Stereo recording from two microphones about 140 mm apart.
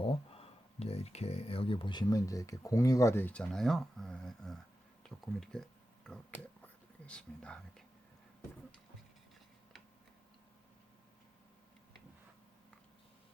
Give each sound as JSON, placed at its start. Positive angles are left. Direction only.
{"t": 0.0, "sound": "speech", "side_deg": 40}